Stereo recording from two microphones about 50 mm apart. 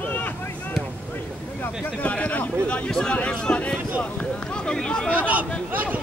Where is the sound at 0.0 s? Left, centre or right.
Left.